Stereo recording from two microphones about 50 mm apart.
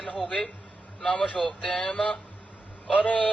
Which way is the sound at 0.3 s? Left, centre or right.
Left.